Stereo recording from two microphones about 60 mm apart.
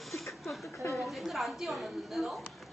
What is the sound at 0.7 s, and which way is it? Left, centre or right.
Speech, left.